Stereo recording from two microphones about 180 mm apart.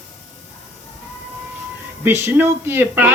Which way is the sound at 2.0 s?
10° right (ahead or behind).